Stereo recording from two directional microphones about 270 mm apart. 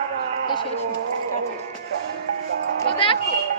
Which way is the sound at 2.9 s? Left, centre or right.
Centre.